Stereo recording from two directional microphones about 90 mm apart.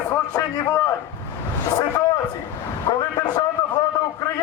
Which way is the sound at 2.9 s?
65° left (ahead or behind).